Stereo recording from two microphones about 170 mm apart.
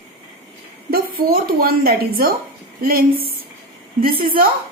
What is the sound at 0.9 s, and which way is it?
A woman's voice, 60° right (ahead or behind).